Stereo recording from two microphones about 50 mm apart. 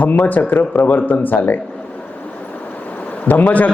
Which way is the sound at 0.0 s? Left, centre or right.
Left.